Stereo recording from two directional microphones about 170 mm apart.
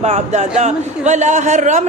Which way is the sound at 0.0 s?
40° right (ahead or behind).